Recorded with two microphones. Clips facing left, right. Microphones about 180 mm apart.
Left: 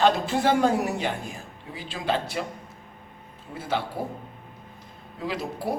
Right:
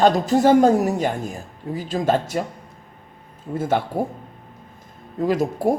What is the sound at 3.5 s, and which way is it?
Speech, 50° right (ahead or behind).